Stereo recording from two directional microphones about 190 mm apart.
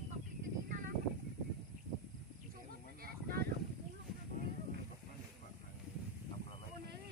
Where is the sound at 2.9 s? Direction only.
55° right (ahead or behind).